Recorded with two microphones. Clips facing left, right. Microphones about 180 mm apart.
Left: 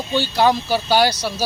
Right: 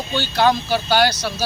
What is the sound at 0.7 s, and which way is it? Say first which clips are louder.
Speech: left 1 dB; 5° left (ahead or behind).